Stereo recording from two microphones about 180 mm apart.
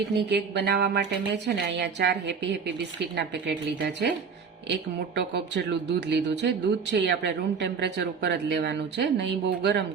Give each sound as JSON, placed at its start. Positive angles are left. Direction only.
{"t": 0.2, "sound": "speech", "side_deg": -65}